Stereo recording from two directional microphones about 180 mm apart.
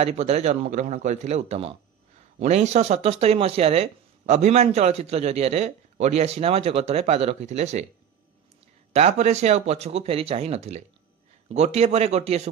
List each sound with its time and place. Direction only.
0.0 s speech: 35° right (ahead or behind)
8.9 s speech: 35° right (ahead or behind)